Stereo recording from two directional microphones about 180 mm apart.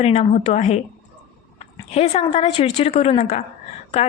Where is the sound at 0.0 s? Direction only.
35° left (ahead or behind).